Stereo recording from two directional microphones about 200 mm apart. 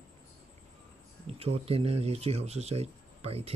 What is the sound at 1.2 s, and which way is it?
Speech, 30° right (ahead or behind).